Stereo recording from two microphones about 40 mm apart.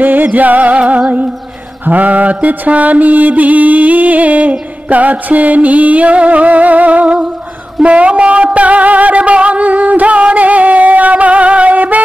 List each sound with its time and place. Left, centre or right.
0.0 s music: right
0.7 s mantra: right
7.8 s music: right